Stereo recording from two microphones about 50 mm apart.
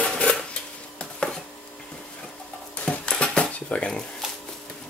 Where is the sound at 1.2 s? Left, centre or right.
Left.